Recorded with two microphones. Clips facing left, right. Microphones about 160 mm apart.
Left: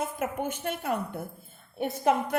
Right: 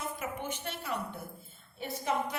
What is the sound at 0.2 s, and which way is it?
A woman's voice, 50° left (ahead or behind).